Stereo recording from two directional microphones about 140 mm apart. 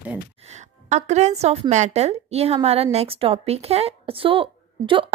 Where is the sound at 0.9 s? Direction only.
55° right (ahead or behind).